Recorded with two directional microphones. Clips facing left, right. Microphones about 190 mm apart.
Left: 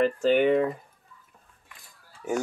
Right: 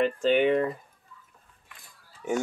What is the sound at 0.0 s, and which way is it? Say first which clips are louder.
Speech: left 1 dB; 5° left (ahead or behind).